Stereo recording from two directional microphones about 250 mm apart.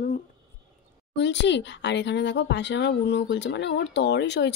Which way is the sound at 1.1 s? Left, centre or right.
Left.